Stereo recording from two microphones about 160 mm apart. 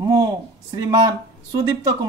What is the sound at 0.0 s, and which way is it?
A man's voice, 25° right (ahead or behind).